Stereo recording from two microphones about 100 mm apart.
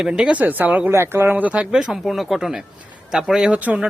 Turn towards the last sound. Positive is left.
turn(degrees=-10)  # may be behind; listen again after turning